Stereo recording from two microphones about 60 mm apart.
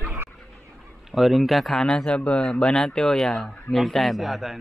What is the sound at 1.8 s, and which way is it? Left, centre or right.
A man's voice, centre.